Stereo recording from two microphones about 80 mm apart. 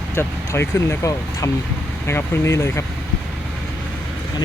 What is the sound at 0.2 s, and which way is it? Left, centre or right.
Speech, left.